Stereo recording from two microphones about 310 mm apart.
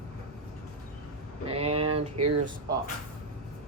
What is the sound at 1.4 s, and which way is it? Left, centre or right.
Speech, centre.